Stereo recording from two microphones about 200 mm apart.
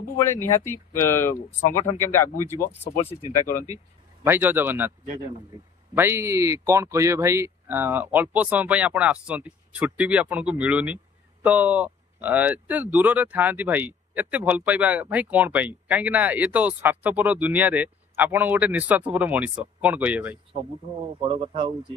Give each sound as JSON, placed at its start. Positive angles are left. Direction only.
{"t": 0.2, "sound": "speech", "side_deg": 10}
{"t": 3.3, "sound": "speech", "side_deg": 40}
{"t": 3.6, "sound": "a man's voice", "side_deg": -15}
{"t": 5.9, "sound": "speech", "side_deg": -10}
{"t": 21.2, "sound": "speech", "side_deg": -25}